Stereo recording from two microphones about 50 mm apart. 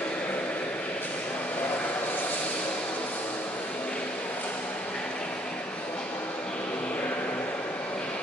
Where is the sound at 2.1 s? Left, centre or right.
Left.